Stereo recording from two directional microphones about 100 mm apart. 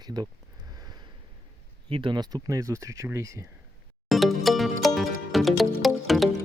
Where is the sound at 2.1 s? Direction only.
45° right (ahead or behind).